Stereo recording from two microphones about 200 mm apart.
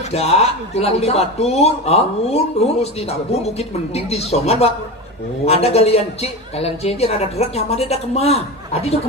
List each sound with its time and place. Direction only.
0.1 s speech: 30° left (ahead or behind)